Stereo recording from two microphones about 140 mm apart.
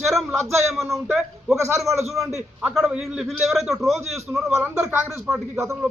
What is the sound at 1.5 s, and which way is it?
Speech, 20° right (ahead or behind).